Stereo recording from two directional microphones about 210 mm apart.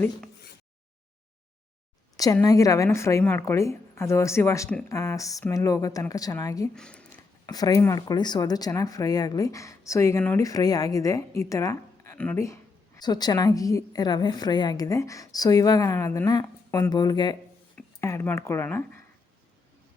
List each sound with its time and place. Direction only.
2.1 s speech: 15° left (ahead or behind)
6.7 s speech: 5° left (ahead or behind)
7.4 s speech: 15° left (ahead or behind)